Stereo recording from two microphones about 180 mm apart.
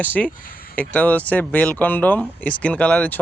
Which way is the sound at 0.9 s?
10° left (ahead or behind).